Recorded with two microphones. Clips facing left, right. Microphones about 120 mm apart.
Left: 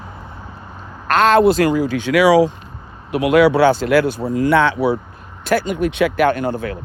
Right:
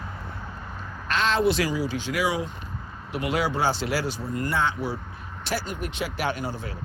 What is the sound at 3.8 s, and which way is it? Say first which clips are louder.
Speech: left 12 dB; 55° left (ahead or behind).